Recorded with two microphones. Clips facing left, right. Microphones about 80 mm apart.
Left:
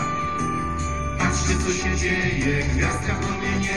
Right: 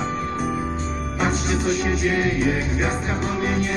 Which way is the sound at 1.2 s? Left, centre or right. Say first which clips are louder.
Right 2 dB; right.